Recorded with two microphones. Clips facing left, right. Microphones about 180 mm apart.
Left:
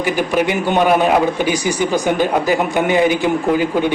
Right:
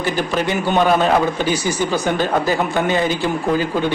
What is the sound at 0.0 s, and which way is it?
A man's voice, 15° left (ahead or behind).